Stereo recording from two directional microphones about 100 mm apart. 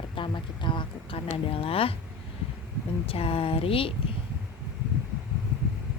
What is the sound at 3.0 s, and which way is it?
Speech, 70° left (ahead or behind).